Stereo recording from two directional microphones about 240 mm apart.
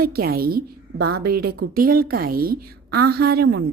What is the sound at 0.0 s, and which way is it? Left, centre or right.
A woman's voice, right.